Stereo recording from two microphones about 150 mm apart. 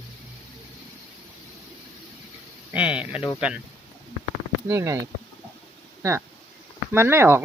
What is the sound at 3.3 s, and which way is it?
Speech, 5° right (ahead or behind).